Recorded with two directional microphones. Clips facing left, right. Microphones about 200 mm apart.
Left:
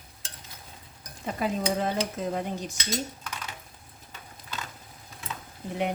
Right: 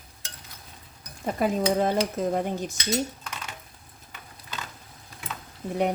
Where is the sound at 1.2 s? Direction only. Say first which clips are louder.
Right 4 dB; 45° right (ahead or behind).